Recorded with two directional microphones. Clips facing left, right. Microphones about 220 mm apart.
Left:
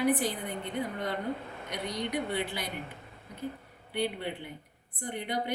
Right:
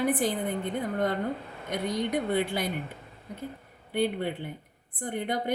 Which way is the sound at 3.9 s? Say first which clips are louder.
Right 5 dB; 50° right (ahead or behind).